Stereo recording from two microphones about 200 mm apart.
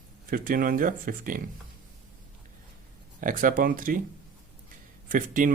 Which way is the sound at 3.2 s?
40° right (ahead or behind).